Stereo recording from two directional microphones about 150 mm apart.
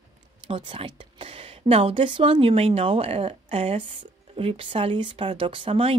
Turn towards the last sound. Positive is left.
turn(degrees=-35)  # may be behind; listen again after turning